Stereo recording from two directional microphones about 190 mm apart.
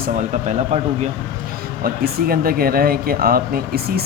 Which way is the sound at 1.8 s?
50° right (ahead or behind).